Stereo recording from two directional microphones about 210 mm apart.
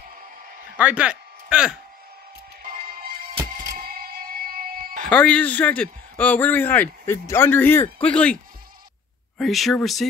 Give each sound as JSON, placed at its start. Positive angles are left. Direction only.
{"t": 0.7, "sound": "speech", "side_deg": -5}
{"t": 2.6, "sound": "music", "side_deg": -45}
{"t": 5.1, "sound": "a man's voice", "side_deg": 5}
{"t": 9.4, "sound": "speech", "side_deg": 0}